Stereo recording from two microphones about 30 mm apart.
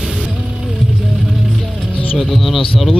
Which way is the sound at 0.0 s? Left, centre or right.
Centre.